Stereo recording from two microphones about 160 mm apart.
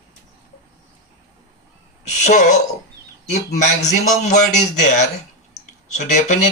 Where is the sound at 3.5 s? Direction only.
50° left (ahead or behind).